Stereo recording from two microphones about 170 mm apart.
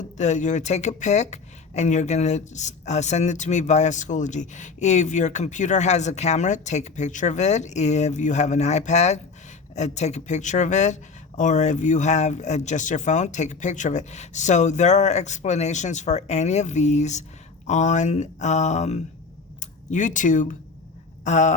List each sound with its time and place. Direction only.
0.0 s speech: 45° left (ahead or behind)